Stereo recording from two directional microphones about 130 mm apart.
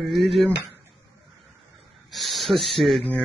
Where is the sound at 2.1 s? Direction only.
Centre (ahead or behind).